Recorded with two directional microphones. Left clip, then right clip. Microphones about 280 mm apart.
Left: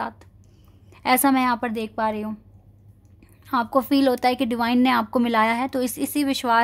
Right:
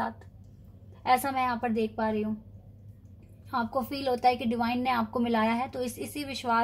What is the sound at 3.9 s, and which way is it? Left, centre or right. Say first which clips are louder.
A woman's voice: left 6 dB; left.